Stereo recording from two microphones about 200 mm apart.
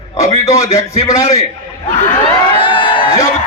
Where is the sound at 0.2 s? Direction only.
15° left (ahead or behind).